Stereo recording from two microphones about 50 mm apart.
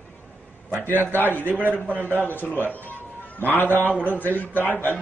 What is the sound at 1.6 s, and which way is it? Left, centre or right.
Speech, right.